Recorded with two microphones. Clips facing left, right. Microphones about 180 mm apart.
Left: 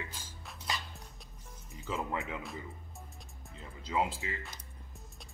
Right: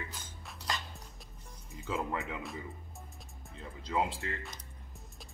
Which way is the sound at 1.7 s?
Centre (ahead or behind).